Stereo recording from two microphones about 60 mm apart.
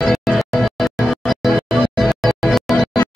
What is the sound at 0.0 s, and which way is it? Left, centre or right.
Music, centre.